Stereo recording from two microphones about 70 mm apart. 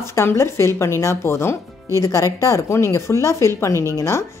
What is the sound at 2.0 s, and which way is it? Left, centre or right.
Speech, left.